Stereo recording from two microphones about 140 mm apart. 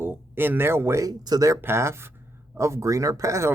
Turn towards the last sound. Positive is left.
turn(degrees=-20)  # may be behind; listen again after turning